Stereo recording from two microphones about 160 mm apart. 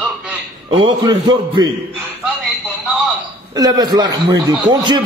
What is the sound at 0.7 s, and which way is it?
A man's voice, 30° right (ahead or behind).